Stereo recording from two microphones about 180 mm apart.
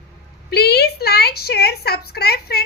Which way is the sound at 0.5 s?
60° left (ahead or behind).